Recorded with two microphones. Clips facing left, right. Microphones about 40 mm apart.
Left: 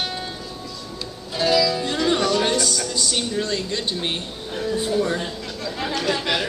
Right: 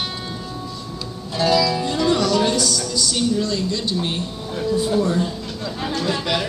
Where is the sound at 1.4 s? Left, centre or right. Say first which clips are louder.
Right 1 dB; centre.